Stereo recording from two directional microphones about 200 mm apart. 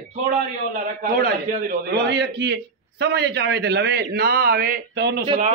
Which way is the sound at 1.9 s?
55° right (ahead or behind).